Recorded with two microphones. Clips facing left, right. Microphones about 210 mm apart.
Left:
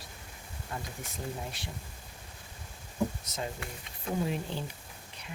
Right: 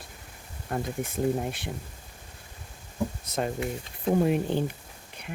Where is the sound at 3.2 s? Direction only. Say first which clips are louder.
Right 9 dB; 60° right (ahead or behind).